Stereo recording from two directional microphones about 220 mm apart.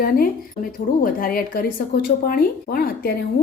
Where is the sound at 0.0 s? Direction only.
40° left (ahead or behind).